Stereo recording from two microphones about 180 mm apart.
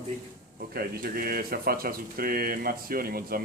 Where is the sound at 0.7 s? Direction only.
55° right (ahead or behind).